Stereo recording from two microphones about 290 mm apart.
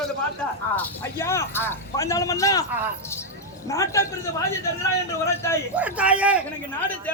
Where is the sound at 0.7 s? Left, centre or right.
Centre.